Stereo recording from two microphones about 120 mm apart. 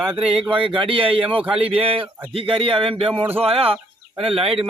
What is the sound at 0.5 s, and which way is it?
Speech, 45° right (ahead or behind).